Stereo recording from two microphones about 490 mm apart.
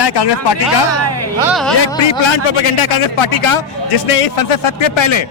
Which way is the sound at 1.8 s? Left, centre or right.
Left.